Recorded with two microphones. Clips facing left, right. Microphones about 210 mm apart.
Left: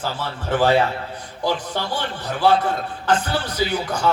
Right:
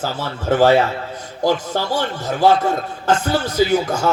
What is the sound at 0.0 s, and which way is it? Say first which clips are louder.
A man's voice: right 3 dB; 45° right (ahead or behind).